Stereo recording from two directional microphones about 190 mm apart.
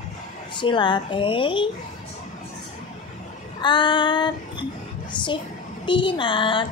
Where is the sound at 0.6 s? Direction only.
25° left (ahead or behind).